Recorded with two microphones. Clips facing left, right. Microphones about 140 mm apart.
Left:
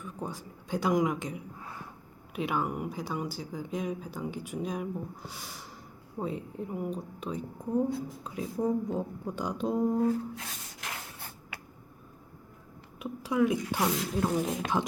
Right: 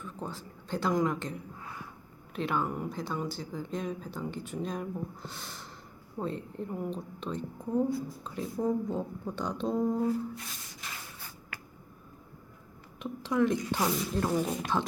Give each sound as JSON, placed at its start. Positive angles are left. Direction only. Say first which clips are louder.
{"t": 0.0, "sound": "a woman's voice", "louder": "left 1 dB", "side_deg": 10}
{"t": 10.3, "sound": "rub", "louder": "left 2 dB", "side_deg": 75}
{"t": 13.0, "sound": "a woman's voice", "louder": "left 1 dB", "side_deg": 10}